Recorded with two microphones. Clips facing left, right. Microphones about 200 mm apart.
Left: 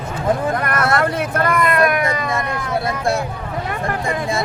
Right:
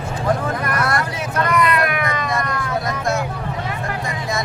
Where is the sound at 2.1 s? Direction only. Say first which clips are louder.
Left 1 dB; 25° left (ahead or behind).